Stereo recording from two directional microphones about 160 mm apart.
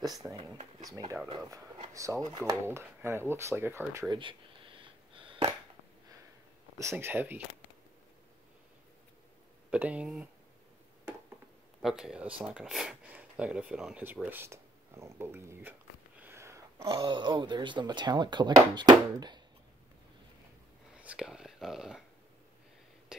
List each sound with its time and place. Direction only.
0.2 s speech: 10° right (ahead or behind)
2.0 s speech: 20° right (ahead or behind)
4.1 s a sound: 30° right (ahead or behind)
6.8 s speech: 15° right (ahead or behind)
9.7 s speech: 10° right (ahead or behind)
11.8 s speech: 5° right (ahead or behind)
16.2 s a sound: 15° right (ahead or behind)
16.9 s speech: 30° right (ahead or behind)
21.0 s speech: 5° right (ahead or behind)